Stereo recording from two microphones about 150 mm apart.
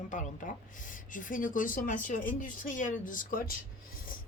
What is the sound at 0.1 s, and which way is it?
Speech, 55° left (ahead or behind).